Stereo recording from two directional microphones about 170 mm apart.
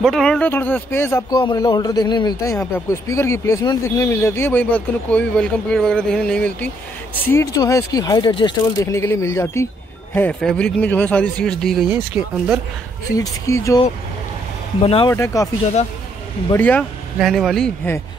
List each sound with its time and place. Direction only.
0.0 s speech: 5° left (ahead or behind)
1.4 s speech: 25° left (ahead or behind); by 6.7 s 5° left (ahead or behind)
7.2 s speech: 20° left (ahead or behind)
11.9 s speech: 10° right (ahead or behind)
13.1 s speech: 20° left (ahead or behind)
14.8 s speech: 35° left (ahead or behind)
15.0 s speech: 15° left (ahead or behind)
16.5 s speech: 10° left (ahead or behind)
17.2 s speech: centre (ahead or behind)